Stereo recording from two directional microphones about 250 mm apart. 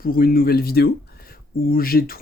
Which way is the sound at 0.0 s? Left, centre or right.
Left.